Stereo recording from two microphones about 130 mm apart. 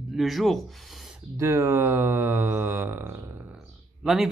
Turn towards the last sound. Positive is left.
turn(degrees=0)  # may be behind; listen again after turning